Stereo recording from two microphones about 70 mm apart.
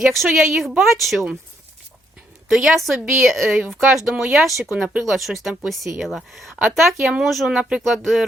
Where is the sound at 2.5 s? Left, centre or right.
Centre.